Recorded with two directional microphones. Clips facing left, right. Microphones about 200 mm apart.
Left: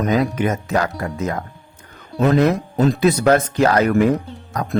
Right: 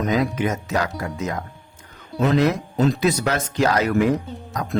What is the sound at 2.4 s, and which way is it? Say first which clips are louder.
Speech: left 3 dB; 55° left (ahead or behind).